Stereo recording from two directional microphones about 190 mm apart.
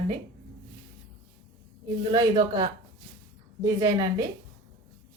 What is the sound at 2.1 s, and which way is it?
A woman's voice, 25° right (ahead or behind).